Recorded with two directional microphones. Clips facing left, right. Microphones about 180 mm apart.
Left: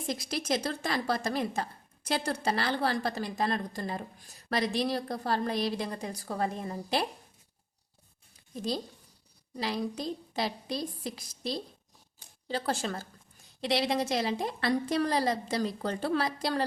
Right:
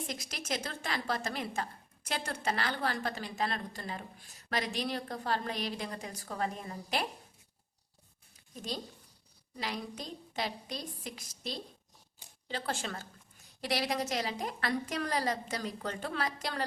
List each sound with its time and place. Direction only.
0.1 s a woman's voice: 35° left (ahead or behind)
9.6 s a woman's voice: 30° left (ahead or behind)
13.6 s a woman's voice: 25° left (ahead or behind)